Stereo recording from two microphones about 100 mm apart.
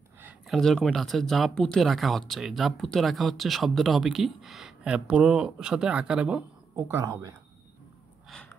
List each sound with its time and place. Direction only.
0.5 s speech: 5° left (ahead or behind)
6.9 s speech: 30° right (ahead or behind)
8.3 s gasp: 10° left (ahead or behind)